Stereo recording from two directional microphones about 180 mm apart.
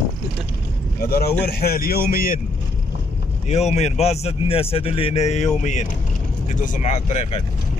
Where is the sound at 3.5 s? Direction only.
40° left (ahead or behind).